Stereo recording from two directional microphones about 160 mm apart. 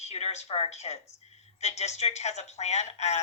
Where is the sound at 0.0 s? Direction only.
40° left (ahead or behind).